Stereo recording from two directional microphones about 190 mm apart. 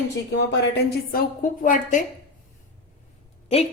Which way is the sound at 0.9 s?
50° left (ahead or behind).